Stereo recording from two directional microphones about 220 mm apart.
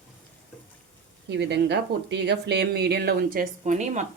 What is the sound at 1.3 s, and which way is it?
A woman's voice, 50° right (ahead or behind).